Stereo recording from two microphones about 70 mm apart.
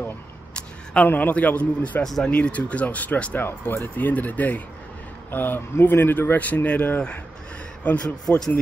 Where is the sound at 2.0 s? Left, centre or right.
Centre.